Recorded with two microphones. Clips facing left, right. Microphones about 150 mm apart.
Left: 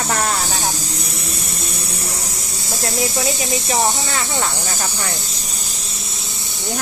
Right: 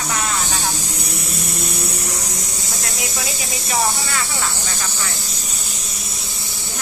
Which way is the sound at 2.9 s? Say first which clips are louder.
Left 9 dB; centre (ahead or behind).